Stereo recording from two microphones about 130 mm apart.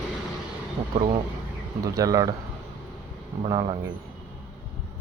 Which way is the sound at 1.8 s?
25° right (ahead or behind).